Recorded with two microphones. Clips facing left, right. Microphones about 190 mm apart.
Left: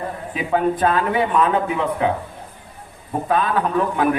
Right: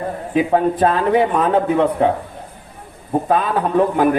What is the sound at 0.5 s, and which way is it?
Speech, 35° right (ahead or behind).